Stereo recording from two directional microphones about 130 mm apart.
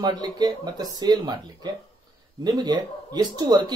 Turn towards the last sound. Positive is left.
turn(degrees=-35)  # may be behind; listen again after turning